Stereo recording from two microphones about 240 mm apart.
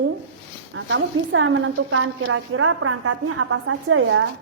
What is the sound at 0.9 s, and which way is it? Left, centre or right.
A woman's voice, right.